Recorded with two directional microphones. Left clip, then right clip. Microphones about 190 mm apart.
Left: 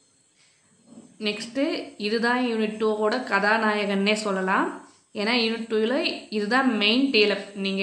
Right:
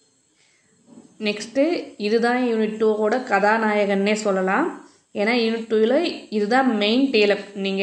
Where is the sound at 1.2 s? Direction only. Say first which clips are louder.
Right 5 dB; 15° right (ahead or behind).